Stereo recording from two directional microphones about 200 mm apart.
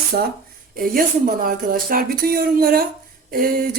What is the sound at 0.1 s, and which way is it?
Speech, 45° right (ahead or behind).